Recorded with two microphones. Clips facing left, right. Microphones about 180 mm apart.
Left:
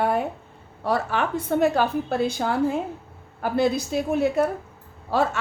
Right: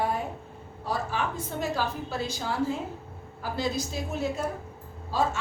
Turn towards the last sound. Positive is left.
turn(degrees=65)  # may be behind; listen again after turning